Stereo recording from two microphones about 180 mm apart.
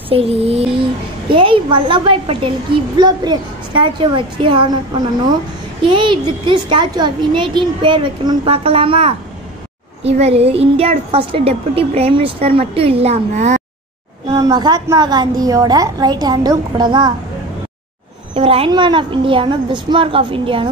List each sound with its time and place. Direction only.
0.1 s a woman's voice: 35° right (ahead or behind)
14.3 s a woman's voice: 20° right (ahead or behind)
18.3 s a woman's voice: 35° right (ahead or behind)